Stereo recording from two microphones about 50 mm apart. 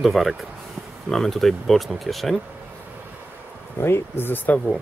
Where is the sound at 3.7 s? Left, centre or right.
Left.